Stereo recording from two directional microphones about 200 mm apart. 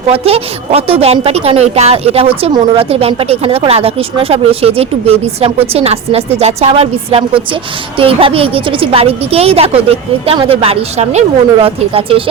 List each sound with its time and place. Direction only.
0.1 s a woman's voice: 30° right (ahead or behind)